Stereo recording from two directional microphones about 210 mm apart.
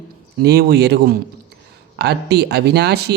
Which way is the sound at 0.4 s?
50° right (ahead or behind).